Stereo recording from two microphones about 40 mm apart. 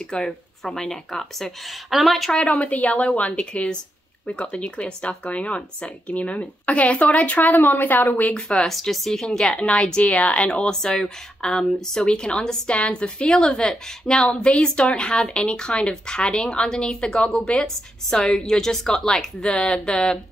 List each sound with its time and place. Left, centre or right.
0.1 s speech: centre
1.7 s speech: centre
2.3 s speech: left
4.3 s speech: left
8.4 s speech: centre
8.7 s speech: centre
9.6 s speech: left
10.7 s speech: centre
13.3 s speech: centre